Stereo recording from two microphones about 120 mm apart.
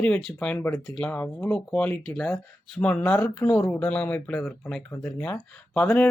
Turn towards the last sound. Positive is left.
turn(degrees=15)  # may be behind; listen again after turning